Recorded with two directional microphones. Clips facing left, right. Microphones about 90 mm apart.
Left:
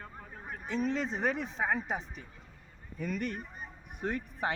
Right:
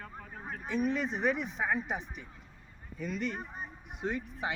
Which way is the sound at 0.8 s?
30° left (ahead or behind).